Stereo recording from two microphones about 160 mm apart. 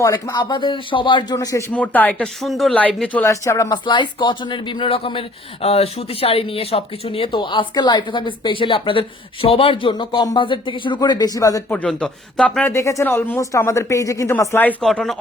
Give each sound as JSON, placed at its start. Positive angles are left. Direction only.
{"t": 0.0, "sound": "speech", "side_deg": 20}
{"t": 1.7, "sound": "speech", "side_deg": 10}
{"t": 11.7, "sound": "speech", "side_deg": 10}
{"t": 12.7, "sound": "speech", "side_deg": 20}